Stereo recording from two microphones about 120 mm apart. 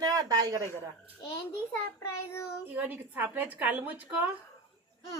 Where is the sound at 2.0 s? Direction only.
20° left (ahead or behind).